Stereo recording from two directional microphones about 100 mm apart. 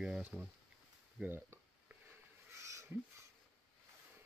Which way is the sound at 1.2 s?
20° right (ahead or behind).